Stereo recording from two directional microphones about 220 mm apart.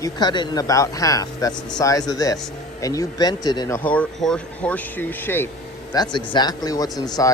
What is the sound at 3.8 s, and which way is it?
Speech, 5° left (ahead or behind).